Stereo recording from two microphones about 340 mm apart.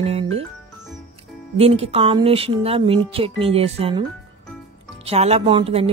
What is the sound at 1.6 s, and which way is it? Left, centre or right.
A woman's voice, centre.